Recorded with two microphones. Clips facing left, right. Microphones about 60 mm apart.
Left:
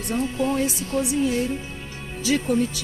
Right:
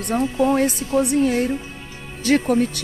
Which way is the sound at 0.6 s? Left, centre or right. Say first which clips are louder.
Right 5 dB; right.